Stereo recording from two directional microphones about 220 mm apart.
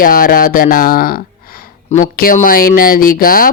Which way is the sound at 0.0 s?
40° left (ahead or behind).